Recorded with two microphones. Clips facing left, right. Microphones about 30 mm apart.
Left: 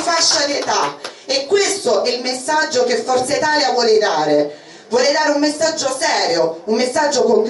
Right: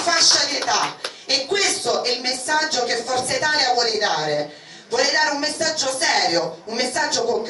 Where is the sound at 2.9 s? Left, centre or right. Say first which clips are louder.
Left 6 dB; centre.